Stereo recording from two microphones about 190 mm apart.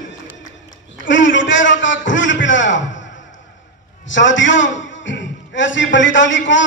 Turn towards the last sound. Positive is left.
turn(degrees=75)  # may be behind; listen again after turning